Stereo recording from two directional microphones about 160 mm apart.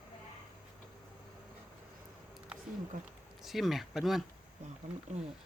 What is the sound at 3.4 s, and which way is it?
Speech, centre (ahead or behind).